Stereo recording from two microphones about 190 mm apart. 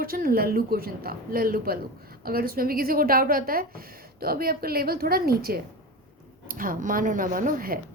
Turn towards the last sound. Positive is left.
turn(degrees=-45)  # may be behind; listen again after turning